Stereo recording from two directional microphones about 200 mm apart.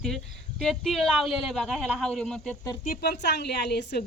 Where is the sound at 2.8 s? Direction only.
50° left (ahead or behind).